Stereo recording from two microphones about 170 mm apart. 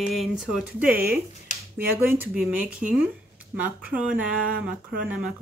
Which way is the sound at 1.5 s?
45° left (ahead or behind).